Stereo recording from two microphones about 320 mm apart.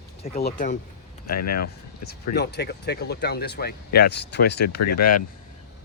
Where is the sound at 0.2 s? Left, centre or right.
Left.